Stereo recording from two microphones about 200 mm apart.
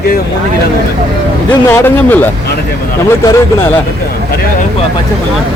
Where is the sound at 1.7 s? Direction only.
10° left (ahead or behind).